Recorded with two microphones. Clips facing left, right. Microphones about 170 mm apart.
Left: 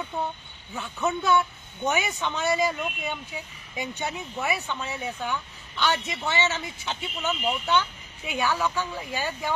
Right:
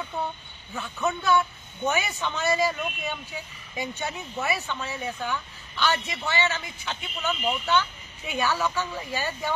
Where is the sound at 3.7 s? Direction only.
15° left (ahead or behind).